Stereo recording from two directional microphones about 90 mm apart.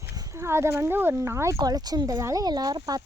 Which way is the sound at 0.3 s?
30° right (ahead or behind).